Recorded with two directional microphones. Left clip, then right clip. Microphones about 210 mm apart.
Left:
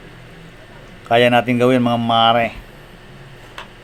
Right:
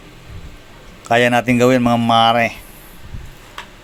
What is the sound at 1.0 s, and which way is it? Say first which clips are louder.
Speech: even; 35° right (ahead or behind).